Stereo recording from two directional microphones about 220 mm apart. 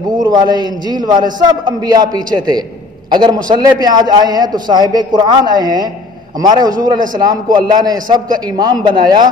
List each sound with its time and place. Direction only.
0.3 s a man's voice: 20° right (ahead or behind)